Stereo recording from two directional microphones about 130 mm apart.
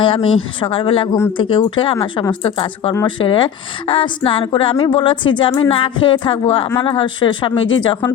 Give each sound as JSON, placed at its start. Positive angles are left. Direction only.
{"t": 0.0, "sound": "a woman's voice", "side_deg": 45}